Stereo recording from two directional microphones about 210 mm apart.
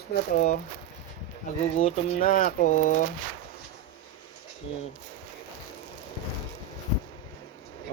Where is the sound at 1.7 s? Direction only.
30° left (ahead or behind).